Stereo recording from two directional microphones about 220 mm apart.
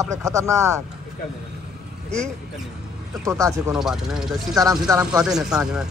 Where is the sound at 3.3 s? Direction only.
15° right (ahead or behind).